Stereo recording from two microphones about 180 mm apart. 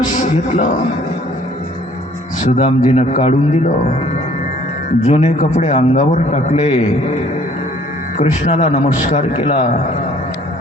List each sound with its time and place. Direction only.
0.0 s a sound: 40° left (ahead or behind)
2.4 s a man's voice: 40° left (ahead or behind)
5.0 s a man's voice: 40° left (ahead or behind)
8.2 s a man's voice: 40° left (ahead or behind)